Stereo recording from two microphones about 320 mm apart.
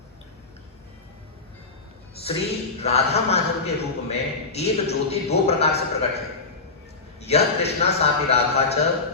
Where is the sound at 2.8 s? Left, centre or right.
Centre.